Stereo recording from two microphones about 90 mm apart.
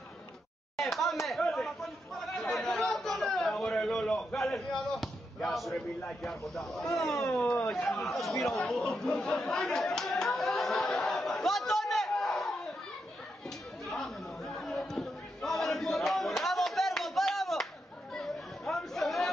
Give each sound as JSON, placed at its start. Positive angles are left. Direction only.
{"t": 0.7, "sound": "a sound", "side_deg": 0}
{"t": 1.2, "sound": "chatter", "side_deg": 0}
{"t": 5.8, "sound": "speech", "side_deg": 0}
{"t": 7.9, "sound": "chatter", "side_deg": 0}
{"t": 13.8, "sound": "chatter", "side_deg": 5}